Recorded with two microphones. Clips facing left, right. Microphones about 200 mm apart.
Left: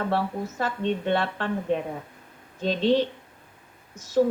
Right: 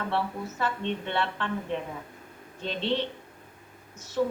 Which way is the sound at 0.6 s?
40° left (ahead or behind).